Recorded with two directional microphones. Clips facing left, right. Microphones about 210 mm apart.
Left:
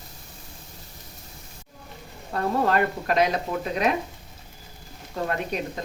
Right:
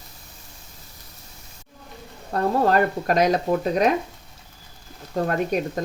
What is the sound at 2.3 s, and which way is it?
Speech, 40° right (ahead or behind).